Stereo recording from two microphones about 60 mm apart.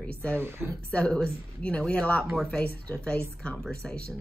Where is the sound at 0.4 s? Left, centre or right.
Right.